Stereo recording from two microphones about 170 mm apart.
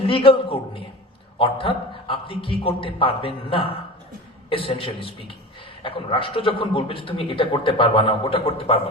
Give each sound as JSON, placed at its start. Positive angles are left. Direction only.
{"t": 0.0, "sound": "a man's voice", "side_deg": 35}